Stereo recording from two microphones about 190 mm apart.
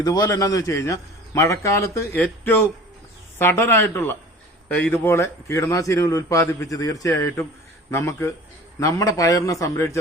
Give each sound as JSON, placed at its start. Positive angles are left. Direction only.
{"t": 0.0, "sound": "a man's voice", "side_deg": 20}